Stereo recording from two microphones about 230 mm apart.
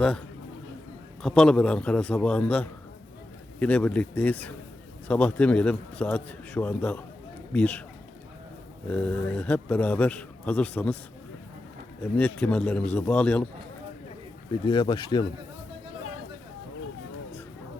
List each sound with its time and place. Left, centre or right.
1.2 s a man's voice: centre
8.9 s speech: centre
12.1 s a man's voice: centre
14.7 s speech: centre